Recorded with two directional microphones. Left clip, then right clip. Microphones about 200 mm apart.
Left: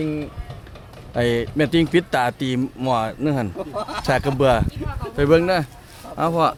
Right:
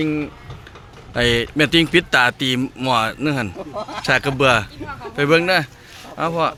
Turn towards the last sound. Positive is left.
turn(degrees=20)  # may be behind; listen again after turning